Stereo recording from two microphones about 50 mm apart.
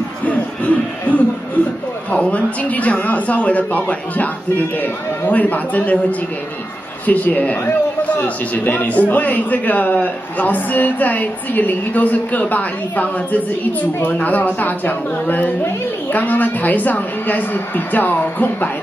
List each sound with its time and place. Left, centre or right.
0.2 s a sound: left
2.1 s a man's voice: left
7.1 s a woman's voice: left